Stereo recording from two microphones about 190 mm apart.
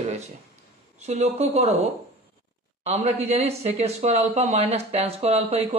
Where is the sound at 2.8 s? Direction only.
35° right (ahead or behind).